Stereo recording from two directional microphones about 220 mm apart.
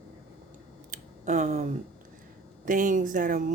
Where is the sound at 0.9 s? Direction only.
35° right (ahead or behind).